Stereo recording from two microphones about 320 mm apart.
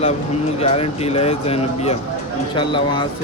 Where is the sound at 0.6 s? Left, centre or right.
Centre.